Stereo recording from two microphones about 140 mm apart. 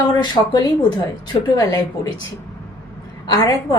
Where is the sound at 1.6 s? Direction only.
25° left (ahead or behind).